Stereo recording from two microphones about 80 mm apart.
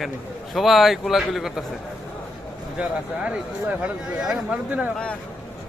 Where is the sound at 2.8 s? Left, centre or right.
Centre.